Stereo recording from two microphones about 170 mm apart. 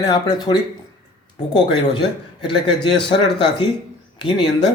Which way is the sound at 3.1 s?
25° left (ahead or behind).